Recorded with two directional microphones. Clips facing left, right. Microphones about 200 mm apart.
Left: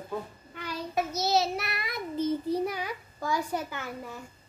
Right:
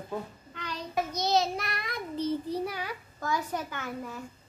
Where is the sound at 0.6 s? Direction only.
10° left (ahead or behind).